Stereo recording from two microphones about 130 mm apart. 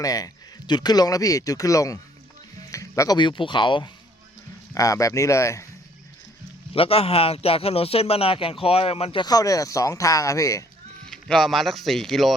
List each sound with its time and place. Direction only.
0.0 s speech: 30° left (ahead or behind)
2.6 s music: 25° left (ahead or behind)
3.2 s speech: 40° left (ahead or behind)
4.7 s speech: 25° left (ahead or behind)
6.7 s speech: 50° left (ahead or behind)
9.2 s speech: 30° left (ahead or behind)
11.1 s speech: centre (ahead or behind)